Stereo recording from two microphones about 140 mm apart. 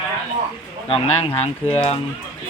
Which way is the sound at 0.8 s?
45° left (ahead or behind).